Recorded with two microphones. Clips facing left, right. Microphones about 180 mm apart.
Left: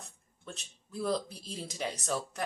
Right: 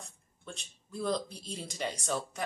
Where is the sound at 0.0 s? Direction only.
Centre (ahead or behind).